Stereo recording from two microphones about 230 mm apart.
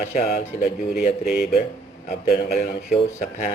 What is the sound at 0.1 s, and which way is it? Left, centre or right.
Speech, left.